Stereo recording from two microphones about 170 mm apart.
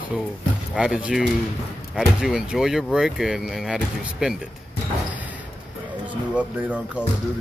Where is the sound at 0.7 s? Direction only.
5° right (ahead or behind).